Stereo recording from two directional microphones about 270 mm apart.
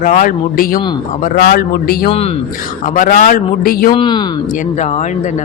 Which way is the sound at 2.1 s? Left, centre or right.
Left.